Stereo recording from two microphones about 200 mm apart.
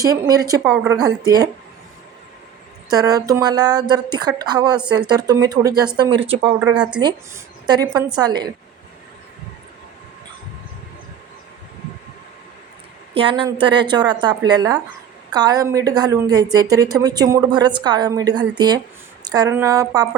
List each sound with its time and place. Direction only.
0.0 s a woman's voice: 20° right (ahead or behind)
2.9 s a woman's voice: 20° right (ahead or behind)
6.6 s speech: 5° right (ahead or behind)
7.0 s a woman's voice: 20° right (ahead or behind)
13.1 s a woman's voice: 25° right (ahead or behind)